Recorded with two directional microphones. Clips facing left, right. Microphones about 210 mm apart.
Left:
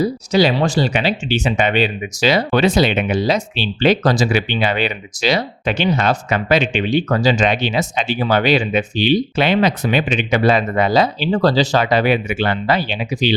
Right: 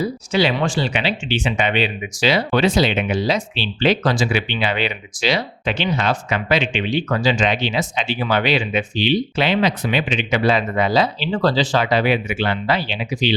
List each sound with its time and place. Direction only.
0.0 s speech: 40° left (ahead or behind)